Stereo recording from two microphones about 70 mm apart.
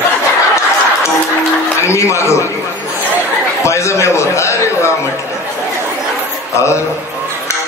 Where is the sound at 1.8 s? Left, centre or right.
Left.